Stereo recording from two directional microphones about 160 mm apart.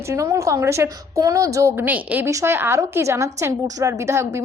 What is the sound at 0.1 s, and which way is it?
A woman's voice, 20° right (ahead or behind).